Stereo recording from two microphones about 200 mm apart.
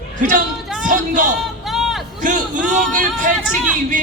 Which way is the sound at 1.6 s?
Centre (ahead or behind).